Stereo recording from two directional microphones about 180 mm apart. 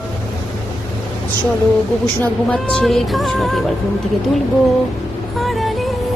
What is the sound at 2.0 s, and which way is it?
Speech, 10° left (ahead or behind).